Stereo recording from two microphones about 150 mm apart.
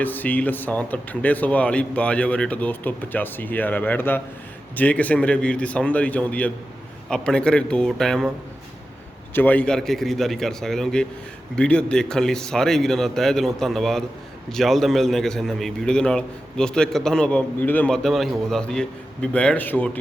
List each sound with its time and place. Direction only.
0.0 s a man's voice: 10° left (ahead or behind)
9.3 s a man's voice: 10° left (ahead or behind)